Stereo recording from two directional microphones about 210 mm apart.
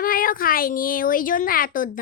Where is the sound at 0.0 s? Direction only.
40° left (ahead or behind).